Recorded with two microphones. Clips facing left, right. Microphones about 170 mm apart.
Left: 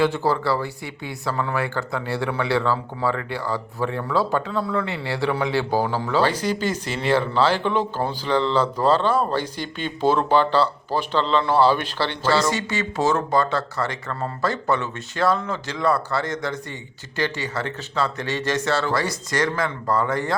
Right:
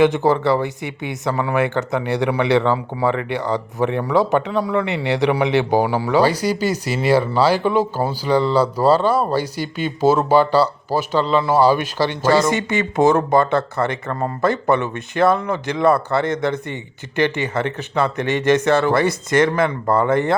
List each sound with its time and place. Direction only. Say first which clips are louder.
0.0 s speech: right 6 dB; 20° right (ahead or behind)
12.5 s speech: right 5 dB; 55° right (ahead or behind)
13.0 s speech: right 7 dB; 15° right (ahead or behind)
13.3 s speech: right 5 dB; 55° right (ahead or behind)
14.5 s speech: right 5 dB; 15° right (ahead or behind)
16.1 s speech: right 6 dB; 60° right (ahead or behind)
17.3 s speech: right 6 dB; 20° right (ahead or behind)
18.9 s speech: right 7 dB; 55° right (ahead or behind)